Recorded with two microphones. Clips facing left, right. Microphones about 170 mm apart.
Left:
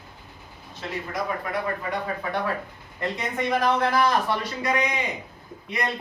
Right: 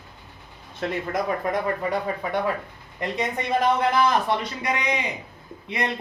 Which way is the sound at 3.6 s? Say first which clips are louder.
Right 2 dB; 20° right (ahead or behind).